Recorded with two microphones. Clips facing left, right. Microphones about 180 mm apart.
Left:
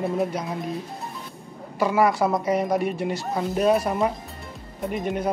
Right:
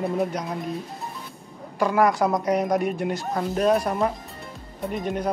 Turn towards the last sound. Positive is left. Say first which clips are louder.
# left 1 dB
turn(degrees=5)  # may be behind; listen again after turning